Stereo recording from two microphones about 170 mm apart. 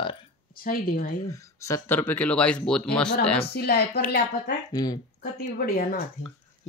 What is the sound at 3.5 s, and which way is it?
A woman's voice, 70° left (ahead or behind).